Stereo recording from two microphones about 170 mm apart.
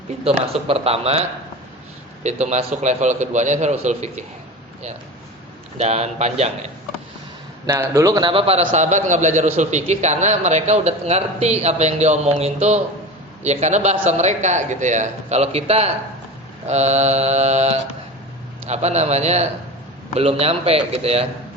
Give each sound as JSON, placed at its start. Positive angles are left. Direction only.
{"t": 0.3, "sound": "speech", "side_deg": -35}
{"t": 2.2, "sound": "a man's voice", "side_deg": -40}
{"t": 5.7, "sound": "speech", "side_deg": -40}
{"t": 7.7, "sound": "speech", "side_deg": -15}